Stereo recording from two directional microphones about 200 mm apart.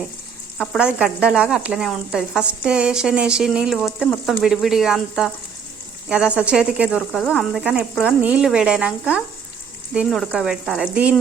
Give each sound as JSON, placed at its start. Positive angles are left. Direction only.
{"t": 0.6, "sound": "speech", "side_deg": 0}